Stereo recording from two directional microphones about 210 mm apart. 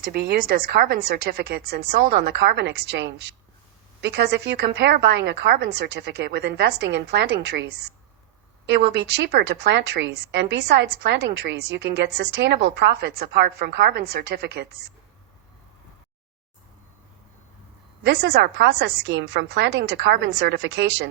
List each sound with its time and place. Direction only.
0.1 s a woman's voice: 50° right (ahead or behind)
18.0 s a woman's voice: 50° right (ahead or behind)